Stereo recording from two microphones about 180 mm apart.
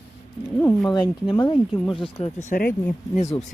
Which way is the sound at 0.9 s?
25° left (ahead or behind).